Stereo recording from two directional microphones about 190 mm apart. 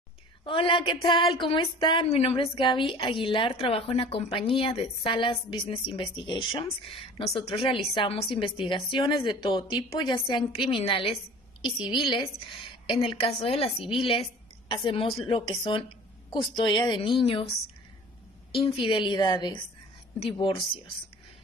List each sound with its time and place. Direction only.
0.5 s a woman's voice: 25° left (ahead or behind)
16.5 s a woman's voice: 25° left (ahead or behind)